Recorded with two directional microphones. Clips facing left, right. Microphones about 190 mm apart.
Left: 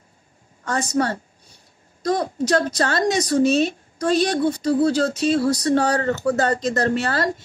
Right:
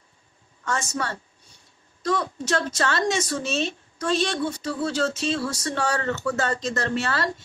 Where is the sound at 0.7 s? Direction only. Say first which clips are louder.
Left 7 dB; 35° left (ahead or behind).